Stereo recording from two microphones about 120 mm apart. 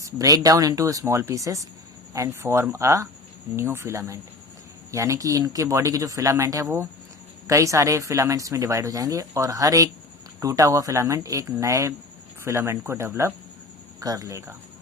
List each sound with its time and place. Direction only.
0.0 s speech: 30° right (ahead or behind)